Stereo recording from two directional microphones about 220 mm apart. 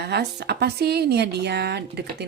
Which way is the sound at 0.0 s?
50° right (ahead or behind).